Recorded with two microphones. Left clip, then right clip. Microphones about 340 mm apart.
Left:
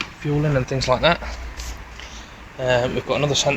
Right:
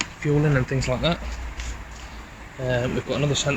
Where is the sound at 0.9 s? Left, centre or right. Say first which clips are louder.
Left 8 dB; centre.